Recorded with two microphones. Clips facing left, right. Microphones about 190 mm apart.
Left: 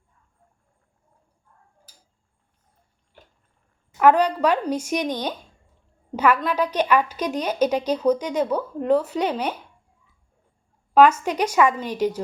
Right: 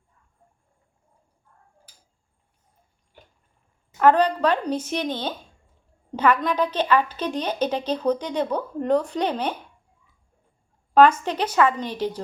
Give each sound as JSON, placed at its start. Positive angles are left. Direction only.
{"t": 3.9, "sound": "a woman's voice", "side_deg": 10}
{"t": 10.9, "sound": "a woman's voice", "side_deg": 10}